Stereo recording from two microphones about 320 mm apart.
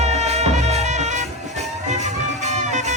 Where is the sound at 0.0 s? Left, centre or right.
Right.